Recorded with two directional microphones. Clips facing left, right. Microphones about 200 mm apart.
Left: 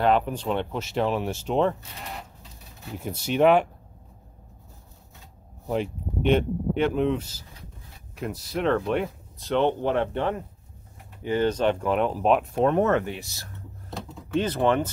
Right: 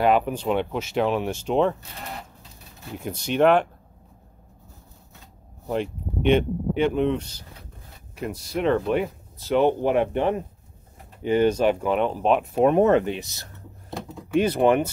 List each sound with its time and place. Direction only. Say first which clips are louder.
0.0 s speech: right 2 dB; 5° right (ahead or behind)
3.0 s speech: right 1 dB; 5° left (ahead or behind)
5.7 s speech: right 1 dB; centre (ahead or behind)
12.5 s speech: right 4 dB; 15° right (ahead or behind)